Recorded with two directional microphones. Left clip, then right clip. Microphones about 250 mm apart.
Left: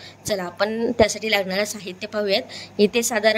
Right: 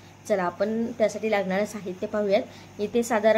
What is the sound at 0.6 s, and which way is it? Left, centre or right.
A woman's voice, left.